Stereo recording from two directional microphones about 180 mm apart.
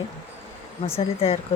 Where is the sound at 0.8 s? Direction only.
35° left (ahead or behind).